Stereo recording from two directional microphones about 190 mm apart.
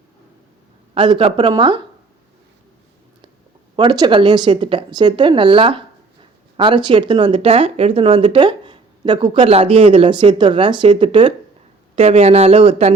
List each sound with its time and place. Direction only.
0.9 s speech: 25° right (ahead or behind)
3.8 s speech: 25° right (ahead or behind)